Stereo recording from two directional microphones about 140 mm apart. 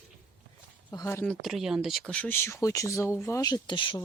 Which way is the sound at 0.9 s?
20° left (ahead or behind).